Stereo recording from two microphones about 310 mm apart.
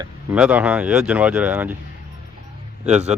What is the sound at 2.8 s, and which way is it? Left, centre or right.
Speech, right.